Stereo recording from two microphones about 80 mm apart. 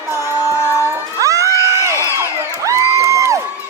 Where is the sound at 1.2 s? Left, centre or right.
Right.